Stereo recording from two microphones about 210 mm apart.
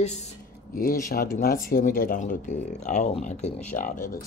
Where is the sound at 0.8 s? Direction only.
45° left (ahead or behind).